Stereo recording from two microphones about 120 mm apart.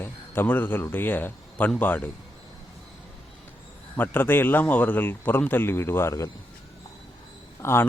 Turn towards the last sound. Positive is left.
turn(degrees=20)  # may be behind; listen again after turning